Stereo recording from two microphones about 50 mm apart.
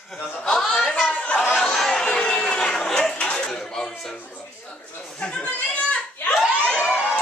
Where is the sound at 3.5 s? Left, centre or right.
Centre.